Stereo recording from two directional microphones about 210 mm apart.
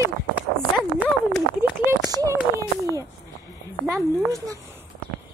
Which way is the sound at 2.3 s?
15° right (ahead or behind).